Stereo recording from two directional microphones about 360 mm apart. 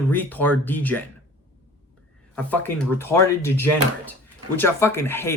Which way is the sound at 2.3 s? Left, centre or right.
Centre.